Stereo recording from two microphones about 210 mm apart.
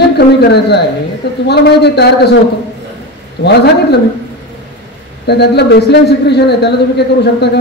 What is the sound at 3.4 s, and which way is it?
Speech, 50° left (ahead or behind).